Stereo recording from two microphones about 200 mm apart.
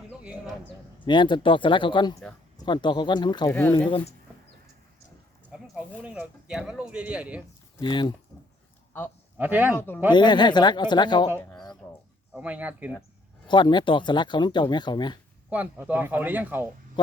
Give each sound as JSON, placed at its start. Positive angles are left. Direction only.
{"t": 1.0, "sound": "speech", "side_deg": 25}
{"t": 5.5, "sound": "a sound", "side_deg": -5}
{"t": 6.0, "sound": "speech", "side_deg": -5}
{"t": 7.8, "sound": "speech", "side_deg": 20}
{"t": 9.4, "sound": "speech", "side_deg": -10}
{"t": 9.7, "sound": "speech", "side_deg": 10}
{"t": 10.1, "sound": "speech", "side_deg": 20}
{"t": 11.8, "sound": "a sound", "side_deg": 10}
{"t": 12.3, "sound": "speech", "side_deg": -5}
{"t": 13.5, "sound": "speech", "side_deg": 25}
{"t": 15.4, "sound": "speech", "side_deg": -5}